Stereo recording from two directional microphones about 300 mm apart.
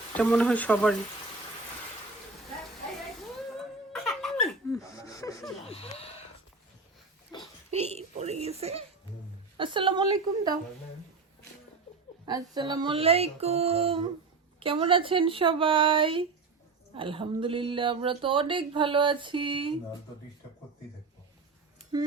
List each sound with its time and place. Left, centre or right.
0.2 s speech: centre
3.9 s laughter: centre
7.3 s a sound: centre
7.7 s a child's voice: right
12.2 s speech: centre
21.9 s speech: centre